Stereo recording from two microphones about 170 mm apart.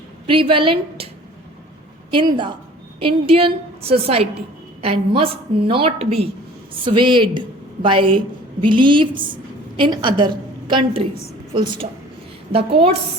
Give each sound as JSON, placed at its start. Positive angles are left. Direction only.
{"t": 0.3, "sound": "a woman's voice", "side_deg": -30}
{"t": 2.0, "sound": "a woman's voice", "side_deg": -30}